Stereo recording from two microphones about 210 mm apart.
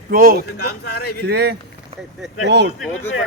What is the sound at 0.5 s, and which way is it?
Speech, 50° left (ahead or behind).